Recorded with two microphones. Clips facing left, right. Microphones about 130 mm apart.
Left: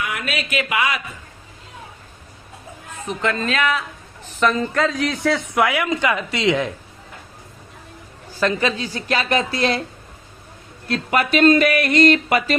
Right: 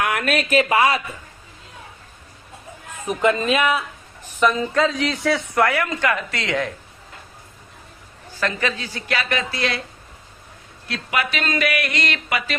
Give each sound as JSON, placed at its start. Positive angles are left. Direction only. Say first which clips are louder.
{"t": 0.0, "sound": "speech", "louder": "right 5 dB", "side_deg": -50}
{"t": 3.1, "sound": "speech", "louder": "right 4 dB", "side_deg": -15}
{"t": 4.4, "sound": "speech", "louder": "even", "side_deg": 0}
{"t": 5.5, "sound": "speech", "louder": "left 1 dB", "side_deg": 10}
{"t": 8.4, "sound": "speech", "louder": "left 4 dB", "side_deg": 25}
{"t": 10.8, "sound": "speech", "louder": "left 4 dB", "side_deg": 40}